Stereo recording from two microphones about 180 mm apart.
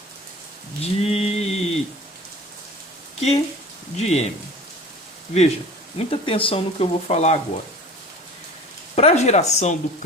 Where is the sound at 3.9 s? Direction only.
40° left (ahead or behind).